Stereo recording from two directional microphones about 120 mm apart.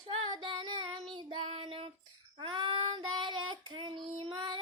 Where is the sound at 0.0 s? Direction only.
45° right (ahead or behind).